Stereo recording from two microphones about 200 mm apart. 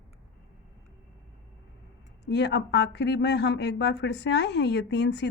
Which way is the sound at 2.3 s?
55° left (ahead or behind).